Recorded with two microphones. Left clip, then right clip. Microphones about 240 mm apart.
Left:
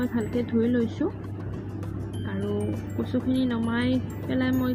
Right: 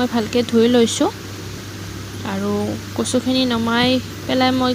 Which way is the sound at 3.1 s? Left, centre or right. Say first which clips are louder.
Right 9 dB; right.